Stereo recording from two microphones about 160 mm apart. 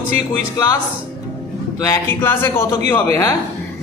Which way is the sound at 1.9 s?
15° left (ahead or behind).